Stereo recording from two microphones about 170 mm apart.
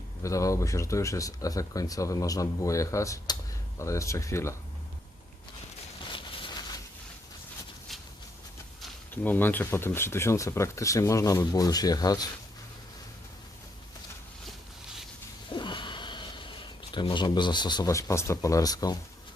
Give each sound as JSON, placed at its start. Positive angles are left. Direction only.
{"t": 0.2, "sound": "speech", "side_deg": 20}
{"t": 6.1, "sound": "a sound", "side_deg": 25}
{"t": 9.2, "sound": "speech", "side_deg": 10}
{"t": 15.4, "sound": "sniff", "side_deg": 25}